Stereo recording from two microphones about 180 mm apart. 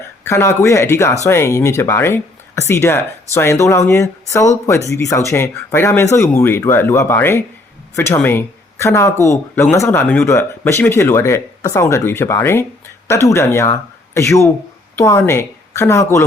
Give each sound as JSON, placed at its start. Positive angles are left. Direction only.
{"t": 0.3, "sound": "speech", "side_deg": 15}